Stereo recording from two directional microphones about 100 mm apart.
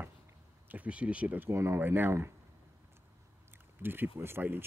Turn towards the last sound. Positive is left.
turn(degrees=-20)  # may be behind; listen again after turning